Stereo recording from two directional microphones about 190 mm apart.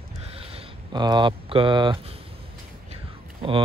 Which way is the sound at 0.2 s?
30° right (ahead or behind).